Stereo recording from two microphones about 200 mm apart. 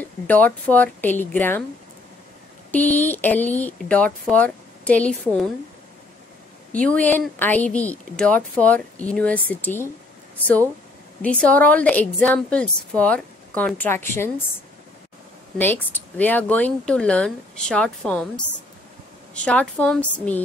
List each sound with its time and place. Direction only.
0.0 s a woman's voice: 10° left (ahead or behind)
2.7 s a woman's voice: 10° left (ahead or behind)
6.7 s a woman's voice: 5° left (ahead or behind)
11.2 s a woman's voice: 5° left (ahead or behind)
15.5 s a woman's voice: 10° left (ahead or behind)
19.4 s a woman's voice: 5° left (ahead or behind)